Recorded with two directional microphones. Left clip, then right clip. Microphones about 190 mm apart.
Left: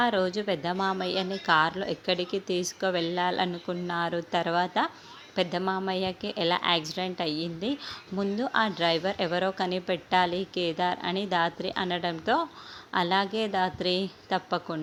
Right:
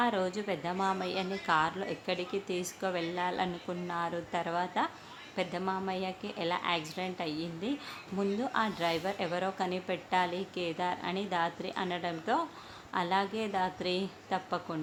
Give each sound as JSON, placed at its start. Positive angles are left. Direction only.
{"t": 0.0, "sound": "a woman's voice", "side_deg": 25}